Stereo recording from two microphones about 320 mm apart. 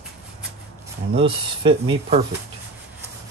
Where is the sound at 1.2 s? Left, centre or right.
Centre.